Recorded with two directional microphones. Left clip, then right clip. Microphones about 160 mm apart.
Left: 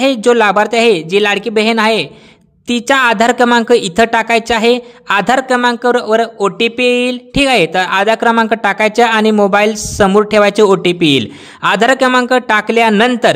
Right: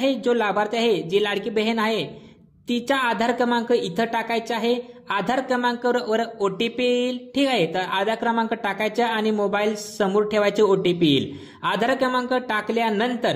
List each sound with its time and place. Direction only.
0.0 s speech: 40° left (ahead or behind)